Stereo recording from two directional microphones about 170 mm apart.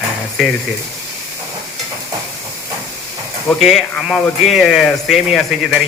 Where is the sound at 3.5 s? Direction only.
Centre (ahead or behind).